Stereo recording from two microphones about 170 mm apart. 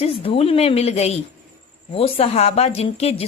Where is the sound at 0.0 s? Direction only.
35° left (ahead or behind).